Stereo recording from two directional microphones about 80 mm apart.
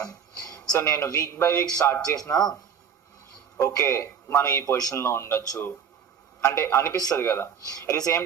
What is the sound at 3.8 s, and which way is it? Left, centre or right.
Speech, left.